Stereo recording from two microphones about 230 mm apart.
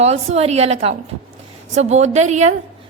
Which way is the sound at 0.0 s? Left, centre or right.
Right.